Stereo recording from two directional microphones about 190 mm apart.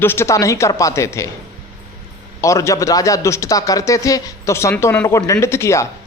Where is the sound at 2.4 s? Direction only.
15° left (ahead or behind).